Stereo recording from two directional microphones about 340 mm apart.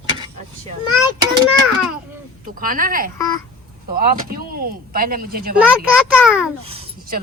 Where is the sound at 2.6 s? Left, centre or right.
Right.